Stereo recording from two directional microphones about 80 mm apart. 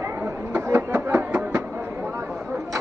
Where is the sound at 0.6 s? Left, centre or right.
Right.